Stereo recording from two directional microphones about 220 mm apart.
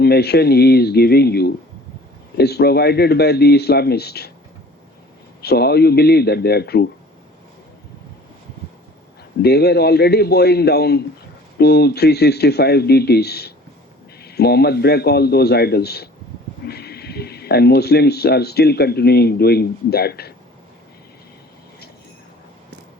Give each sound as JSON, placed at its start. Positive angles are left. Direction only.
{"t": 0.0, "sound": "speech", "side_deg": 45}
{"t": 5.4, "sound": "speech", "side_deg": 45}
{"t": 9.4, "sound": "speech", "side_deg": 45}